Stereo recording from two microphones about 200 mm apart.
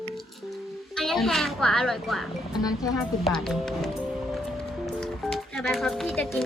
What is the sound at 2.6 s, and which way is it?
Speech, 15° left (ahead or behind).